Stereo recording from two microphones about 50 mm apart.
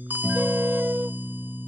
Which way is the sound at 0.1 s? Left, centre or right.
Right.